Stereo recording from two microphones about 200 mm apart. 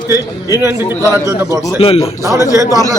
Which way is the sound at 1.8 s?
25° left (ahead or behind).